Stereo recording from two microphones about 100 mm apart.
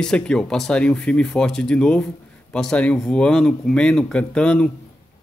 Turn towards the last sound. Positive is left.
turn(degrees=10)  # may be behind; listen again after turning